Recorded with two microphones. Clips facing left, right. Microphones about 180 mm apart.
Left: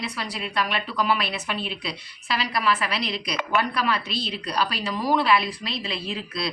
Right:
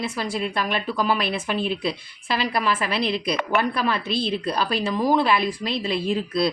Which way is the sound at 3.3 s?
55° right (ahead or behind).